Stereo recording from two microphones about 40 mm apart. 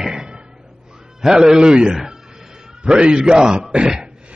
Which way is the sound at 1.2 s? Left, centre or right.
Centre.